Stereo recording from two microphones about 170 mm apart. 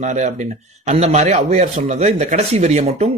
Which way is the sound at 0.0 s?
45° right (ahead or behind).